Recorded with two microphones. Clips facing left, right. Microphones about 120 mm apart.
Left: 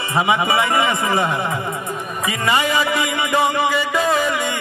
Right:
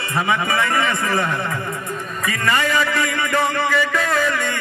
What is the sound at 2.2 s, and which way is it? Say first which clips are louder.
Music: left 1 dB; 15° left (ahead or behind).